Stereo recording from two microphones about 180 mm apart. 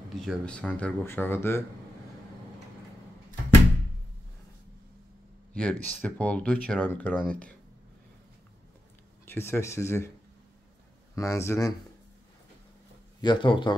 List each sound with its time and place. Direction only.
0.1 s speech: centre (ahead or behind)
5.5 s speech: 5° left (ahead or behind)
9.2 s speech: 15° left (ahead or behind)
11.1 s speech: 15° left (ahead or behind)
13.2 s speech: 25° left (ahead or behind)